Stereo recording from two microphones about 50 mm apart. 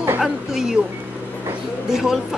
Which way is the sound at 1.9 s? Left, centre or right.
Centre.